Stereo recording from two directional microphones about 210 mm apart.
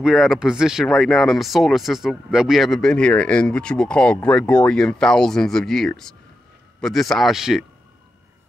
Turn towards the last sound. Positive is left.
turn(degrees=0)  # may be behind; listen again after turning